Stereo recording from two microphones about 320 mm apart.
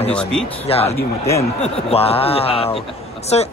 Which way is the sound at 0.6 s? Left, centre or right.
Centre.